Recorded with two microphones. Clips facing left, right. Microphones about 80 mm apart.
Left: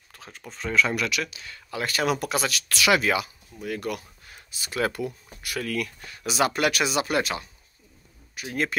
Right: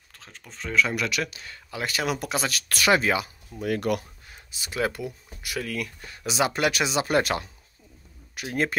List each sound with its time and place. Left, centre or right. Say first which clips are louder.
0.1 s a sound: left 3 dB; centre
0.5 s speech: left 1 dB; centre
0.9 s speech: even; right
1.7 s speech: left 2 dB; centre
2.1 s speech: left 1 dB; right
2.5 s speech: right 2 dB; right
3.6 s speech: right 5 dB; right
4.0 s speech: even; centre
8.5 s speech: right 1 dB; right